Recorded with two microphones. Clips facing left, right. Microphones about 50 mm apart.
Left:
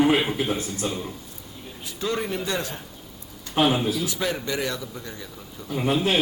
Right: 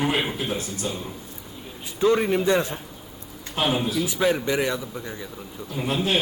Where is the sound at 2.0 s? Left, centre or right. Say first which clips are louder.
Right 7 dB; centre.